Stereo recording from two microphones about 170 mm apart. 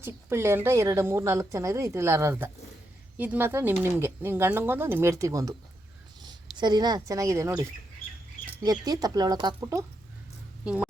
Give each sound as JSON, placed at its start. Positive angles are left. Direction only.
{"t": 0.0, "sound": "a woman's voice", "side_deg": -15}
{"t": 6.6, "sound": "speech", "side_deg": -25}
{"t": 10.6, "sound": "speech", "side_deg": -5}